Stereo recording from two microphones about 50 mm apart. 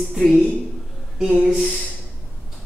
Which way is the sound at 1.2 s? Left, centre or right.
Centre.